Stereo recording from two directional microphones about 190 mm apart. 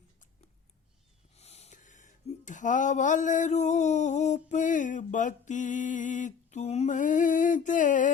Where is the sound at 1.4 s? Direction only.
35° left (ahead or behind).